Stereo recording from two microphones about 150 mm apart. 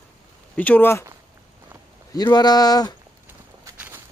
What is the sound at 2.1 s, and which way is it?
Speech, 25° left (ahead or behind).